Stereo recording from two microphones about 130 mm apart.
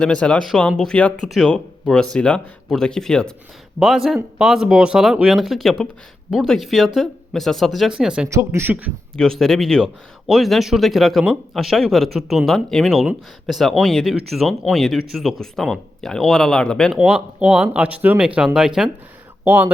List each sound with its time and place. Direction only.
0.0 s speech: 5° left (ahead or behind)
8.3 s speech: 20° right (ahead or behind)
9.1 s speech: 5° left (ahead or behind)
19.5 s speech: 15° right (ahead or behind)